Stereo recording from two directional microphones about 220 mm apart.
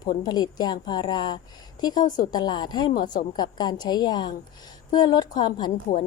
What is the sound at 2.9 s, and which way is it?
Speech, 35° left (ahead or behind).